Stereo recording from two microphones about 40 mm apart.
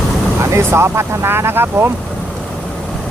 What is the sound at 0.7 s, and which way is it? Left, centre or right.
Speech, right.